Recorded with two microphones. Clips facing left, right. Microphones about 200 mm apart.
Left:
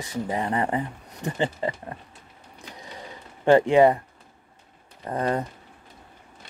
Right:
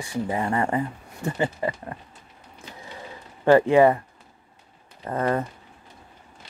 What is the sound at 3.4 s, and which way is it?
Speech, 20° left (ahead or behind).